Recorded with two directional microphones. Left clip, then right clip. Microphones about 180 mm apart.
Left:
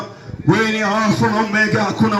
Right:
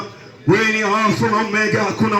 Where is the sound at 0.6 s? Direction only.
40° left (ahead or behind).